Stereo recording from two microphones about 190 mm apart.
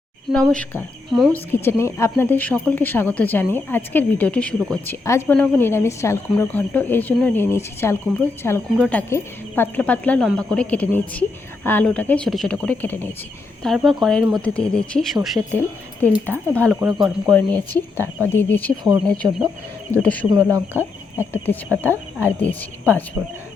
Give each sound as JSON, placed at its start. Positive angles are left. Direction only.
{"t": 0.3, "sound": "speech", "side_deg": 0}
{"t": 1.5, "sound": "speech", "side_deg": 15}
{"t": 8.7, "sound": "speech", "side_deg": 5}
{"t": 15.5, "sound": "speech", "side_deg": 10}
{"t": 16.8, "sound": "speech", "side_deg": -5}
{"t": 17.3, "sound": "speech", "side_deg": 10}
{"t": 17.9, "sound": "speech", "side_deg": -15}
{"t": 18.3, "sound": "speech", "side_deg": 10}
{"t": 20.3, "sound": "speech", "side_deg": -15}
{"t": 21.2, "sound": "speech", "side_deg": 10}
{"t": 21.7, "sound": "speech", "side_deg": -15}